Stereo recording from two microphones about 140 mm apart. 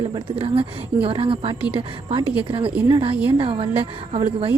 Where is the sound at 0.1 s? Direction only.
40° right (ahead or behind).